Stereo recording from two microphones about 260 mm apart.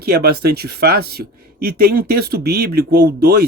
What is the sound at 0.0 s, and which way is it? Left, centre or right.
Speech, right.